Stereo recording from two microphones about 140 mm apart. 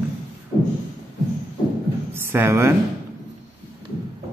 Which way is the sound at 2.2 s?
15° right (ahead or behind).